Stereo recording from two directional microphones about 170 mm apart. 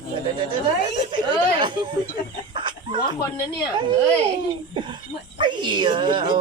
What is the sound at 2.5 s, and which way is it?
Chicken, 30° right (ahead or behind).